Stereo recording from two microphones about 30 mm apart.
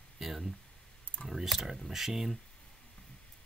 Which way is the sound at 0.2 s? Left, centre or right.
Centre.